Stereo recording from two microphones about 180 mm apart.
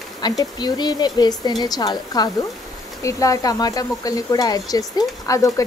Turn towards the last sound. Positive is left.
turn(degrees=20)  # may be behind; listen again after turning